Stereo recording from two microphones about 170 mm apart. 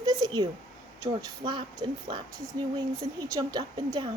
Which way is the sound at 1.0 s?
25° right (ahead or behind).